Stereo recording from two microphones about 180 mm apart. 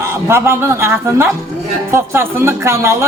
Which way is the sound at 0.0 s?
15° right (ahead or behind).